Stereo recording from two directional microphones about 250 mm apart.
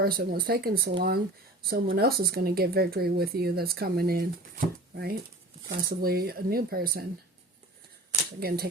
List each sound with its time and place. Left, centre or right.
0.0 s speech: right
8.4 s speech: right